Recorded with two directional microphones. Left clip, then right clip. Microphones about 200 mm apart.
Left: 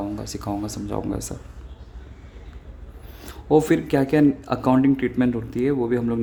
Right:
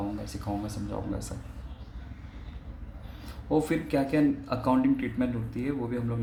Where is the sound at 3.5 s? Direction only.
50° left (ahead or behind).